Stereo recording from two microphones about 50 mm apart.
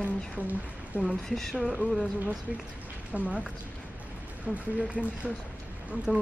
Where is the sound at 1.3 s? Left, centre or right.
Centre.